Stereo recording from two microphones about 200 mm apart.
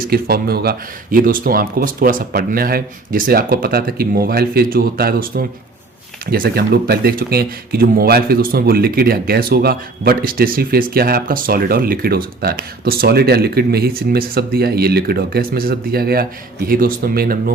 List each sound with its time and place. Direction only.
0.0 s speech: 50° right (ahead or behind)